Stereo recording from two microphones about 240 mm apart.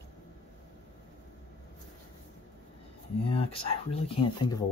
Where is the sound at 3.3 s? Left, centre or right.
Left.